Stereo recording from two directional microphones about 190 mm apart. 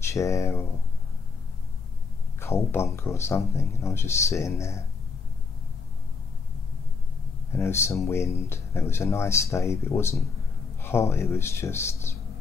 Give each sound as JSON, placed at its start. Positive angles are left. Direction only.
{"t": 0.0, "sound": "speech", "side_deg": 15}
{"t": 2.4, "sound": "speech", "side_deg": 15}
{"t": 7.5, "sound": "speech", "side_deg": 15}